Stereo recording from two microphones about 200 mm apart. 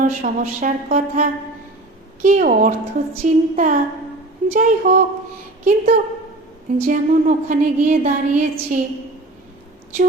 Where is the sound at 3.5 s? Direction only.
40° right (ahead or behind).